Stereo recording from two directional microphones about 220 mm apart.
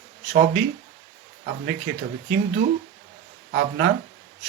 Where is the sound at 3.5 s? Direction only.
55° right (ahead or behind).